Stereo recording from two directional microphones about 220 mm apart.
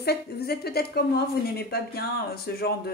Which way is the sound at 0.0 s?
45° left (ahead or behind).